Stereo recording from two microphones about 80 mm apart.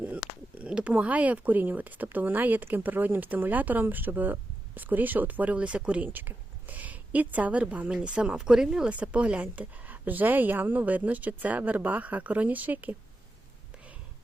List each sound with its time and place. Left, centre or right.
0.6 s a woman's voice: centre